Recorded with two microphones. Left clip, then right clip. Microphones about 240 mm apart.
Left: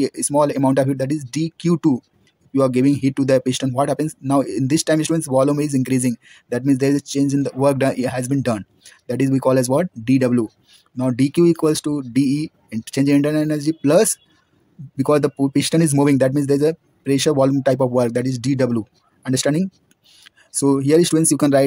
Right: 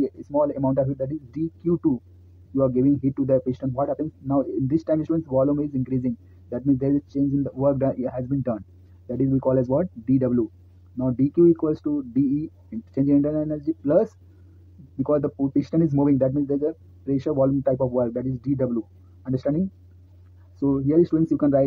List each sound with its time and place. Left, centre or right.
0.0 s speech: left
1.7 s speech: left
5.2 s speech: left
12.6 s speech: left
13.7 s speech: left
15.0 s speech: left
15.5 s speech: left
20.8 s speech: left
21.3 s speech: left